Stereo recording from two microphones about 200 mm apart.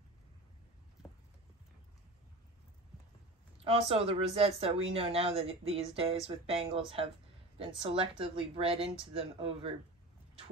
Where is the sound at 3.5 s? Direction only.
30° right (ahead or behind).